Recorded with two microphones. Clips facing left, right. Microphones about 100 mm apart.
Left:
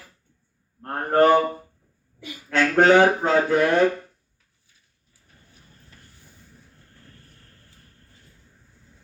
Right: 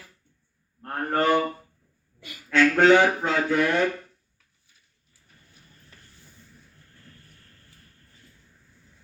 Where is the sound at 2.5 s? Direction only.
35° left (ahead or behind).